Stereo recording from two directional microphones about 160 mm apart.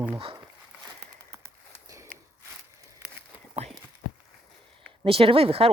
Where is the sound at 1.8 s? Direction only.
20° right (ahead or behind).